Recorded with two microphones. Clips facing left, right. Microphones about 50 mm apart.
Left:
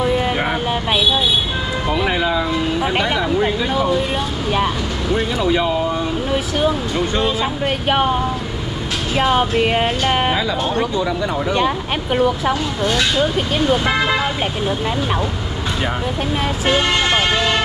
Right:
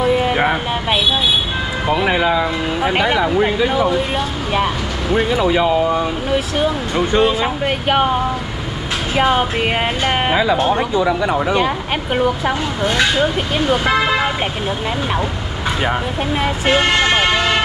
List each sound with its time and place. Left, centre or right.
1.9 s speech: centre
5.1 s speech: centre
10.3 s speech: centre